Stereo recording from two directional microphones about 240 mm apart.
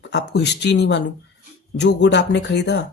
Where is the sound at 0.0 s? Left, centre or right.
Left.